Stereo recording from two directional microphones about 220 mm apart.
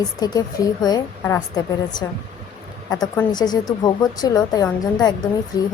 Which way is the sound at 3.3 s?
20° left (ahead or behind).